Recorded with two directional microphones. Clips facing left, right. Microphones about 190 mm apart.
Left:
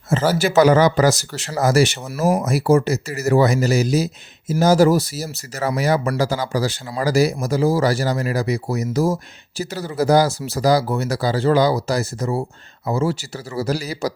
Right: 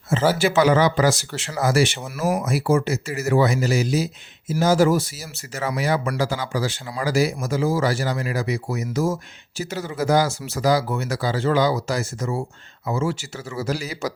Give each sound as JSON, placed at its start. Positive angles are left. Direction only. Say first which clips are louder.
{"t": 0.1, "sound": "speech", "louder": "left 1 dB", "side_deg": 40}